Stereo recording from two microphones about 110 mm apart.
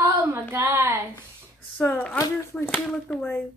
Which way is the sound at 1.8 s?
15° left (ahead or behind).